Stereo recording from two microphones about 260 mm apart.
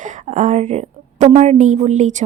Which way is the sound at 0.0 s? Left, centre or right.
Right.